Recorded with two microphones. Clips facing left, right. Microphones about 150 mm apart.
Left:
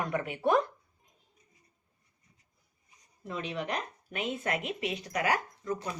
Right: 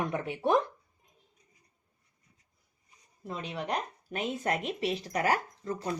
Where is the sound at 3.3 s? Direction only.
35° right (ahead or behind).